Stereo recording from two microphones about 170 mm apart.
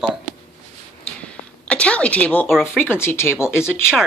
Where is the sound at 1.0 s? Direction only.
5° left (ahead or behind).